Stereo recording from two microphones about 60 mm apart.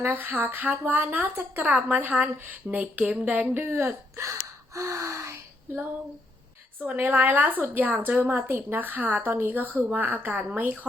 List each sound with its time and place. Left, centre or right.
0.0 s speech: right
2.0 s a sound: right
4.2 s gasp: right
6.7 s speech: right